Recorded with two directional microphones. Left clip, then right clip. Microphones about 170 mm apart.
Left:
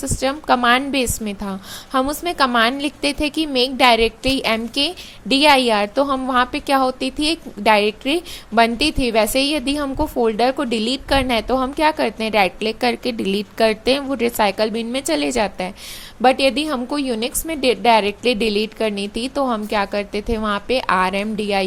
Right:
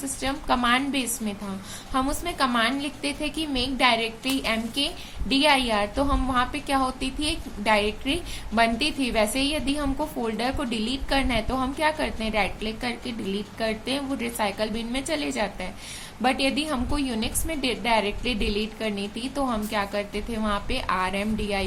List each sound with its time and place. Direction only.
0.0 s a woman's voice: 45° left (ahead or behind)